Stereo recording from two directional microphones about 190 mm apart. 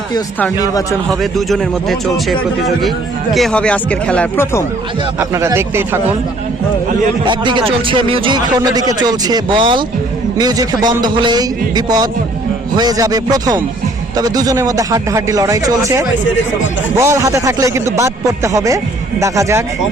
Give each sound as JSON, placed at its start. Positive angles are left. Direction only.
{"t": 0.7, "sound": "a man's voice", "side_deg": 20}
{"t": 1.2, "sound": "speech", "side_deg": 0}
{"t": 5.3, "sound": "speech", "side_deg": -15}
{"t": 7.3, "sound": "speech", "side_deg": -25}